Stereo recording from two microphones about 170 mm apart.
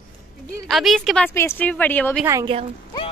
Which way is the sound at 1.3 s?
15° left (ahead or behind).